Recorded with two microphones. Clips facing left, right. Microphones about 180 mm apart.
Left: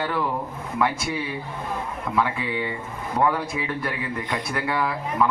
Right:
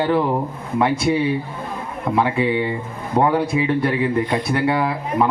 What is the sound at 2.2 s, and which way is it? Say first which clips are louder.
A man's voice: right 6 dB; 25° right (ahead or behind).